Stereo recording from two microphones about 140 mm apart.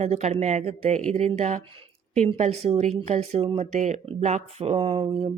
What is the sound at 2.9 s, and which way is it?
Speech, 50° right (ahead or behind).